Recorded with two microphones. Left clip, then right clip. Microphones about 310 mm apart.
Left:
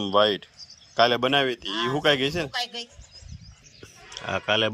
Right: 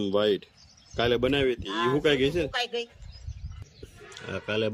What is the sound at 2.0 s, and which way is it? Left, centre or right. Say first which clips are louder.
Speech: left 3 dB; centre.